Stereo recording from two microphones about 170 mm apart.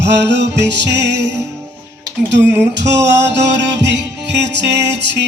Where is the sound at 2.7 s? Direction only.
90° right.